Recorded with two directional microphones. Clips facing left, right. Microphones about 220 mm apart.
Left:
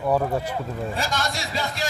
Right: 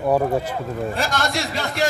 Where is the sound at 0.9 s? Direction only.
60° right (ahead or behind).